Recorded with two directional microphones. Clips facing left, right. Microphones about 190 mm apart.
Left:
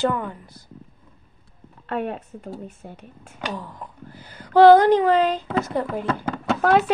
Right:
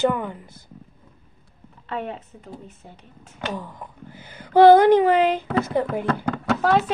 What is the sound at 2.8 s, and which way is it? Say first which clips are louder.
Speech: left 5 dB; 65° left (ahead or behind).